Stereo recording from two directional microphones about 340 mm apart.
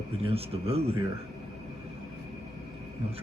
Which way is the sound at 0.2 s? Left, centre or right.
Centre.